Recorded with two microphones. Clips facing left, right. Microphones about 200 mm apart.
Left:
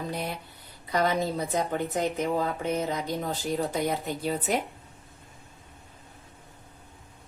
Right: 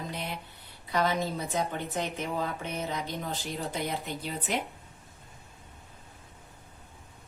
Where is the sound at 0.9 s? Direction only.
40° left (ahead or behind).